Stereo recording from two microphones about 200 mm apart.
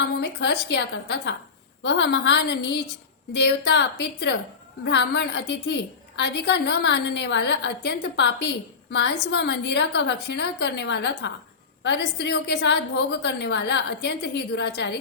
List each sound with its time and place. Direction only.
0.2 s a woman's voice: 55° left (ahead or behind)